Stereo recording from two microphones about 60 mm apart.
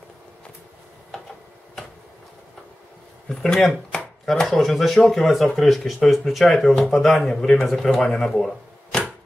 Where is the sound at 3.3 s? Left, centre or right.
Centre.